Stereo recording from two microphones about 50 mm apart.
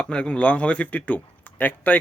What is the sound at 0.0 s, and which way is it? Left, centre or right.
A man's voice, left.